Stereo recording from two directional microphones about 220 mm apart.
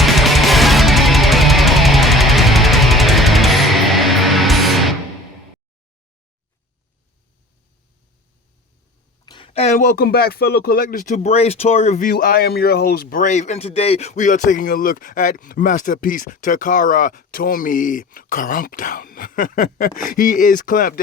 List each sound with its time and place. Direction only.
0.0 s music: centre (ahead or behind)
9.2 s speech: 20° left (ahead or behind); by 21.0 s 40° left (ahead or behind)